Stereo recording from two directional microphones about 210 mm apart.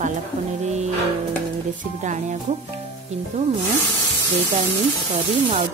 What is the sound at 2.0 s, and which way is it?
Speech, 35° right (ahead or behind).